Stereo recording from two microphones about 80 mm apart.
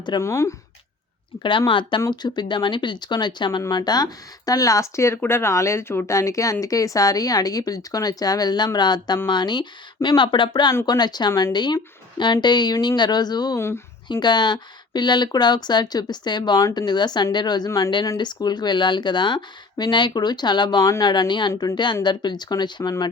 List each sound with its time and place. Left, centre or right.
0.2 s speech: left
1.4 s speech: left
2.0 s speech: left
3.7 s speech: left
6.1 s speech: left
10.8 s speech: left
13.6 s speech: left
14.1 s speech: left